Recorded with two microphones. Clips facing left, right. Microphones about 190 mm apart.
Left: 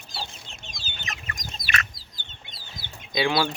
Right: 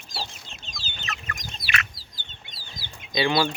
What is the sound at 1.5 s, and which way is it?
Duck, 40° left (ahead or behind).